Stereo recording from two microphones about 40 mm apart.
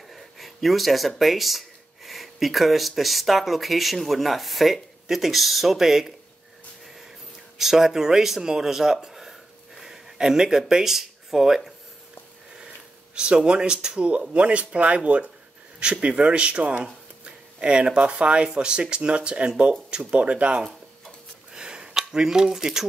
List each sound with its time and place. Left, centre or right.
0.1 s speech: centre
7.5 s speech: centre
13.1 s speech: right
14.3 s speech: right
21.5 s a sound: right
22.1 s speech: centre